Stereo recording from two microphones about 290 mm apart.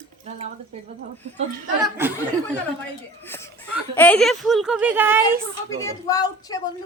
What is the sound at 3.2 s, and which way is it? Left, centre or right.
A woman's voice, centre.